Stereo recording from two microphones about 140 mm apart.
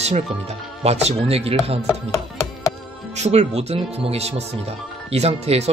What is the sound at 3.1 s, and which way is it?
Speech, 50° right (ahead or behind).